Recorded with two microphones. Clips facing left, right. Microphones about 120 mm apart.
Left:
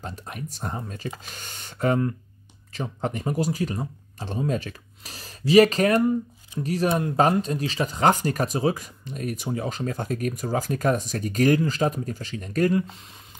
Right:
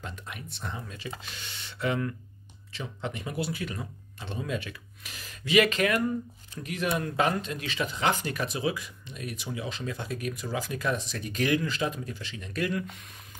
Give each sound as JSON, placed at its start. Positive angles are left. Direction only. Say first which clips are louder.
{"t": 0.0, "sound": "speech", "louder": "left 5 dB", "side_deg": 40}